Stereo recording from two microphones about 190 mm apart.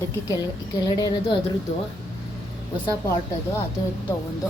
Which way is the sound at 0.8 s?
20° left (ahead or behind).